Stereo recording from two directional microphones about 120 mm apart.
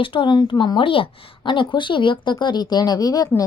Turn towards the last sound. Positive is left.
turn(degrees=30)  # may be behind; listen again after turning